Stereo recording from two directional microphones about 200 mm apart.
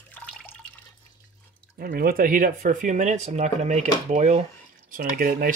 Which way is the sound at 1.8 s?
45° right (ahead or behind).